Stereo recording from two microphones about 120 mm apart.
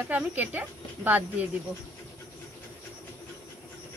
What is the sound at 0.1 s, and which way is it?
Speech, 15° right (ahead or behind).